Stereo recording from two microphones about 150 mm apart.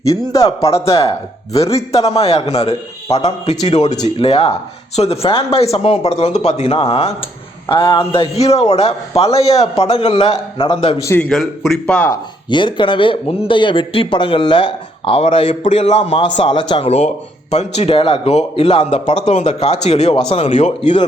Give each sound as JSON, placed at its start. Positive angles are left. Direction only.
{"t": 0.1, "sound": "speech", "side_deg": 25}
{"t": 0.9, "sound": "speech", "side_deg": 40}
{"t": 7.7, "sound": "speech", "side_deg": 30}
{"t": 11.2, "sound": "speech", "side_deg": 5}
{"t": 12.1, "sound": "speech", "side_deg": 30}
{"t": 16.1, "sound": "speech", "side_deg": 35}
{"t": 17.5, "sound": "speech", "side_deg": 50}